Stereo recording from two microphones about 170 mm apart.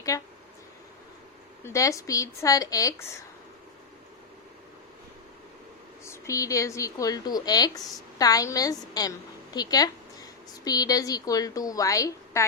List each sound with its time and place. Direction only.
0.1 s a woman's voice: 20° left (ahead or behind)
1.6 s a woman's voice: 20° left (ahead or behind)
6.1 s a woman's voice: 20° left (ahead or behind)